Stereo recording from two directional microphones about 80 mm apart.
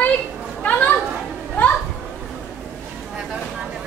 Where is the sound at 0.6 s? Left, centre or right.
Centre.